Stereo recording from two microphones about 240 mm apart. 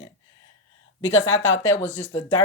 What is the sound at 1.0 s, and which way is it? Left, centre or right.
Speech, left.